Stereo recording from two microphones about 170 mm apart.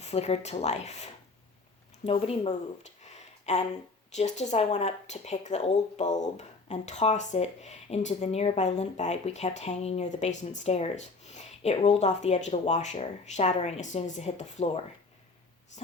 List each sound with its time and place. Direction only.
0.0 s speech: 40° left (ahead or behind)
3.0 s a sound: 40° left (ahead or behind)
4.1 s speech: 40° left (ahead or behind)